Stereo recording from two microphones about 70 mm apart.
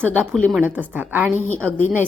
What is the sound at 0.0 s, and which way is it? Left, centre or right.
Speech, right.